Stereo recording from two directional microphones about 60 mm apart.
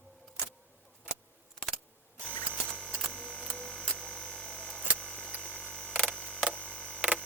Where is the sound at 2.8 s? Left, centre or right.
Centre.